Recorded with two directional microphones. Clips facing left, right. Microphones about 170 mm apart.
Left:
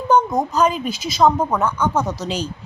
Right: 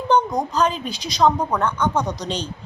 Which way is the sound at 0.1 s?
5° left (ahead or behind).